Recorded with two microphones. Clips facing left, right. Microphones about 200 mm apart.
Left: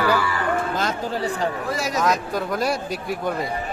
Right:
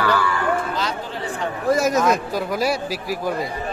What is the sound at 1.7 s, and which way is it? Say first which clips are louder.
Speech: right 7 dB; 45° right (ahead or behind).